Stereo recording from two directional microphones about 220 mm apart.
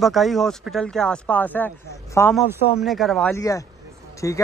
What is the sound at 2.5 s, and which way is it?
Speech, centre (ahead or behind).